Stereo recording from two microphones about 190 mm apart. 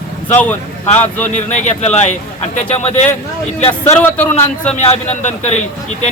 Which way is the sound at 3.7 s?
10° left (ahead or behind).